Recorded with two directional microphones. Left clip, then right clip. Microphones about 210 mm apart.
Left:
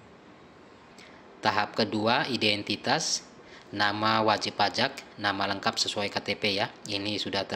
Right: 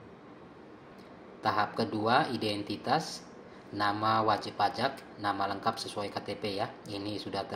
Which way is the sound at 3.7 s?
55° left (ahead or behind).